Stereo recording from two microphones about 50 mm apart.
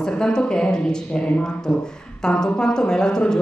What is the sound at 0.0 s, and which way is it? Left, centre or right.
Speech, centre.